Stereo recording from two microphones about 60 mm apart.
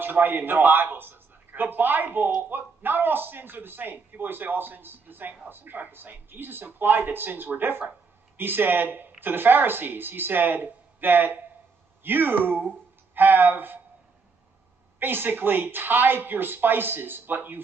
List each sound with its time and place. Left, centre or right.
0.0 s a man's voice: right
15.0 s a man's voice: right